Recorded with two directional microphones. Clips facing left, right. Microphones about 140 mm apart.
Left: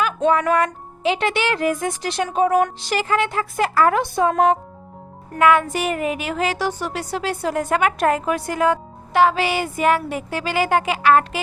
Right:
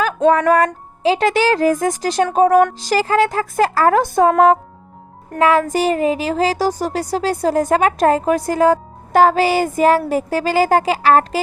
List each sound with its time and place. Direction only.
0.0 s a woman's voice: 40° right (ahead or behind)